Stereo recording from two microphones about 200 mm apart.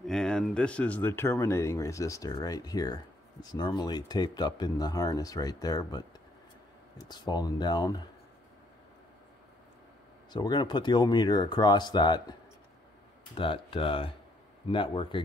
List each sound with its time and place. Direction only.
0.0 s speech: 5° left (ahead or behind); by 8.0 s 20° left (ahead or behind)
10.3 s speech: 20° left (ahead or behind)